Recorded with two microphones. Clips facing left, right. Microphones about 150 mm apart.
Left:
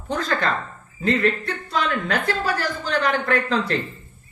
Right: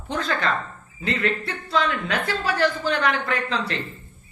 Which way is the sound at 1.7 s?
45° left (ahead or behind).